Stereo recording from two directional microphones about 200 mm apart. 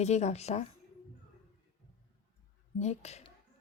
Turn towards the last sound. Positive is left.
turn(degrees=35)  # may be behind; listen again after turning